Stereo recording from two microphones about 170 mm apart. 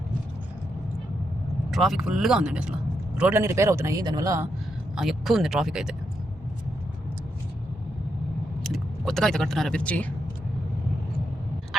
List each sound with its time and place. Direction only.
1.7 s a man's voice: centre (ahead or behind); by 4.4 s 20° right (ahead or behind)
4.9 s speech: centre (ahead or behind)
8.6 s speech: centre (ahead or behind)
11.7 s tick-tock: centre (ahead or behind)